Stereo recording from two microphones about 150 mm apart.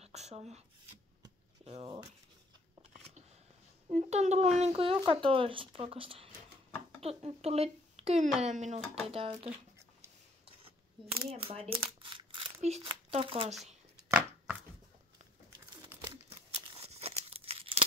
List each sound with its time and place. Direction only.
0.0 s speech: 45° right (ahead or behind)
3.9 s speech: 50° right (ahead or behind)
9.0 s speech: 40° right (ahead or behind)
11.2 s crumpling: 40° right (ahead or behind)
12.6 s speech: 45° right (ahead or behind)
14.1 s chopping: 5° right (ahead or behind)
16.3 s tearing: 45° right (ahead or behind)